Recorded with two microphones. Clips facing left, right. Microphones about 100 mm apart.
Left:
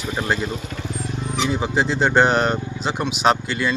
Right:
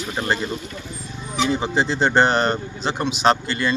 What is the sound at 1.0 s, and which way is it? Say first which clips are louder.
Wild animals: even; 80° left.